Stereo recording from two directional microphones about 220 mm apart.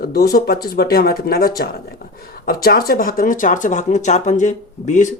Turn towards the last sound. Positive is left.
turn(degrees=35)  # may be behind; listen again after turning